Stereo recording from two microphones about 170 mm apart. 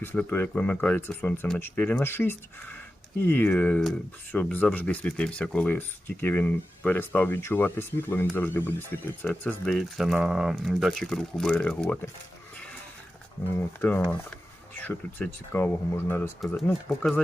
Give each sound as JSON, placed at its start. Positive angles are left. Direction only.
{"t": 0.0, "sound": "speech", "side_deg": 10}
{"t": 13.8, "sound": "speech", "side_deg": 10}